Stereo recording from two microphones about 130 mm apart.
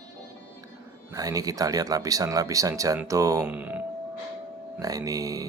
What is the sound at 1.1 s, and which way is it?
Speech, 30° right (ahead or behind).